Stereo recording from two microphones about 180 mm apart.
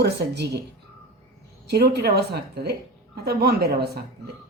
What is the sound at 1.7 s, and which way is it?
A woman's voice, 65° right (ahead or behind).